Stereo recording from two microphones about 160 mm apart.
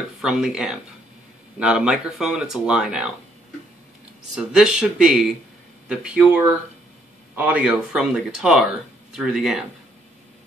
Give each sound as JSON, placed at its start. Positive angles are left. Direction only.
{"t": 0.2, "sound": "speech", "side_deg": -5}
{"t": 4.4, "sound": "speech", "side_deg": -5}
{"t": 7.3, "sound": "speech", "side_deg": -10}